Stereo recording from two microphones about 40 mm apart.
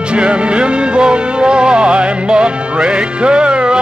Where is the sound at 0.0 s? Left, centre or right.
Right.